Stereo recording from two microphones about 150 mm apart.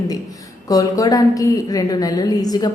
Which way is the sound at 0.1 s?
25° left (ahead or behind).